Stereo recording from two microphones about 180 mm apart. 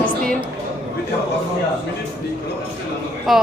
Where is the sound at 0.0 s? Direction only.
5° left (ahead or behind).